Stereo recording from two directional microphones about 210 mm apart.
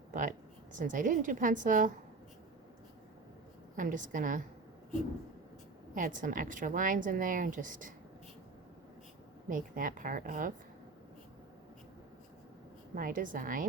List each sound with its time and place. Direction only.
0.1 s a woman's voice: 40° right (ahead or behind)
3.8 s a woman's voice: 40° right (ahead or behind)
5.9 s a woman's voice: 40° right (ahead or behind)
9.5 s a woman's voice: 40° right (ahead or behind)
13.0 s a woman's voice: 40° right (ahead or behind)